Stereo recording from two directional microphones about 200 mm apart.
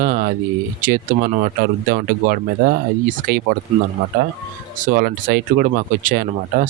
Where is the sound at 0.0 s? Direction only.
45° right (ahead or behind).